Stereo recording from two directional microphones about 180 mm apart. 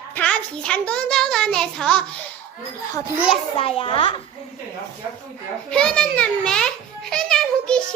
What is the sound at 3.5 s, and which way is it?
Speech, 30° left (ahead or behind).